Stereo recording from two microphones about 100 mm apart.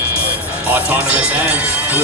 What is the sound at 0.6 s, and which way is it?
Speech, 15° right (ahead or behind).